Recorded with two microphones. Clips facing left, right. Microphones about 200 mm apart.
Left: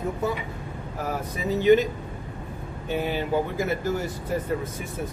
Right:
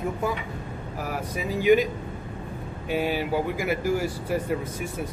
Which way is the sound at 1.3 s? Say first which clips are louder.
Left 1 dB; 10° right (ahead or behind).